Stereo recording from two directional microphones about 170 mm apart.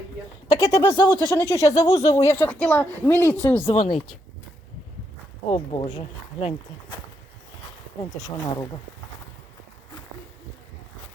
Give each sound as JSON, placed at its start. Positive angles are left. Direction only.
{"t": 0.4, "sound": "speech", "side_deg": 20}
{"t": 3.7, "sound": "speech", "side_deg": 35}
{"t": 5.5, "sound": "speech", "side_deg": 35}